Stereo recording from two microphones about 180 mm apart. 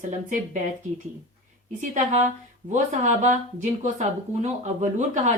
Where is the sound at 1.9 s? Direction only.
40° right (ahead or behind).